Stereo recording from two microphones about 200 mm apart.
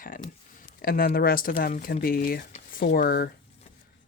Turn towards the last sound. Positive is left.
turn(degrees=50)  # may be behind; listen again after turning